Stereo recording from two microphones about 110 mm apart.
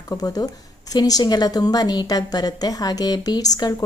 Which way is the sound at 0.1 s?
35° left (ahead or behind).